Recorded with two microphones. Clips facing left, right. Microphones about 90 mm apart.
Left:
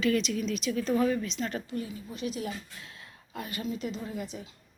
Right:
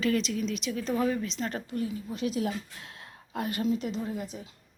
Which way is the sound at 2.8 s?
60° right (ahead or behind).